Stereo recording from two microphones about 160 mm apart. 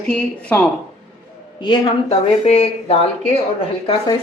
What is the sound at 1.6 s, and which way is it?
Speech, 35° left (ahead or behind).